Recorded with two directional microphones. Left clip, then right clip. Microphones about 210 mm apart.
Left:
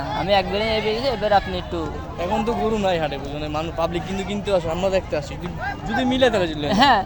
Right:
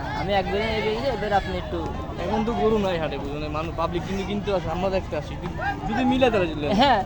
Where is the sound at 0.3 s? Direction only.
55° left (ahead or behind).